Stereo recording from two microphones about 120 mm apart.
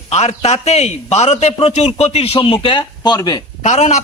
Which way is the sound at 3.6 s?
80° left.